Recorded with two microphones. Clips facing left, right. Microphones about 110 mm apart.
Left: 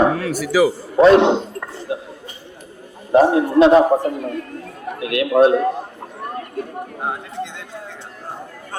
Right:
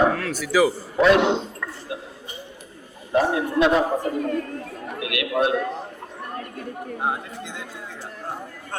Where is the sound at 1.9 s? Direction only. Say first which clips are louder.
Left 9 dB; 25° left (ahead or behind).